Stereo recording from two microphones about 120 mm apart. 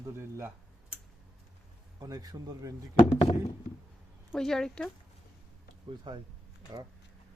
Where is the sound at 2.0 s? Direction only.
30° right (ahead or behind).